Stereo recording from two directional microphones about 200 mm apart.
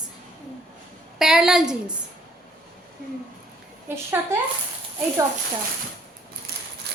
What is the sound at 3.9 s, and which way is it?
Speech, 10° right (ahead or behind).